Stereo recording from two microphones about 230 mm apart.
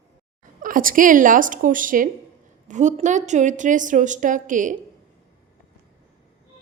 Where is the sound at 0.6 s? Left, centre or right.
Right.